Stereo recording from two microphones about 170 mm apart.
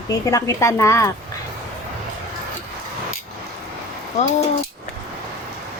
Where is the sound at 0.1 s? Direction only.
20° left (ahead or behind).